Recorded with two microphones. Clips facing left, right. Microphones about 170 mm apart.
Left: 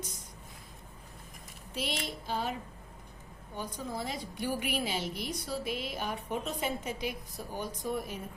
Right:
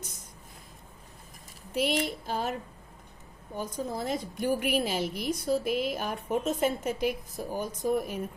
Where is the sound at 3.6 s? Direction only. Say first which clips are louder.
Right 4 dB; 45° right (ahead or behind).